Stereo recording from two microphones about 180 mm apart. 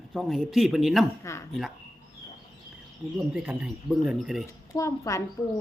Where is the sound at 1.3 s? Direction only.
15° left (ahead or behind).